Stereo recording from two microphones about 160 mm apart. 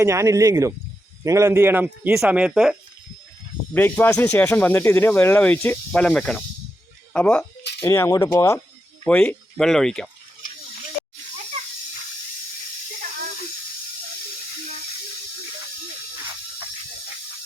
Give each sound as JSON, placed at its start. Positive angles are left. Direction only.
{"t": 0.0, "sound": "speech", "side_deg": -20}
{"t": 3.8, "sound": "speech", "side_deg": 10}
{"t": 7.9, "sound": "speech", "side_deg": 15}
{"t": 9.0, "sound": "speech", "side_deg": 10}